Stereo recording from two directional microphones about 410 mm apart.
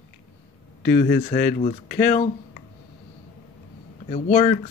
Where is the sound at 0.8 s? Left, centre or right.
Left.